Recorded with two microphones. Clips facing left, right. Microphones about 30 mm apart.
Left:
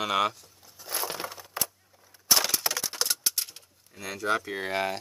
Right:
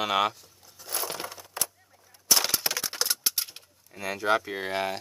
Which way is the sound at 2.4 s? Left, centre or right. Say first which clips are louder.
Even; centre.